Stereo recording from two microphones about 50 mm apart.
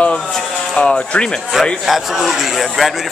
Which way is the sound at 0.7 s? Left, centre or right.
Centre.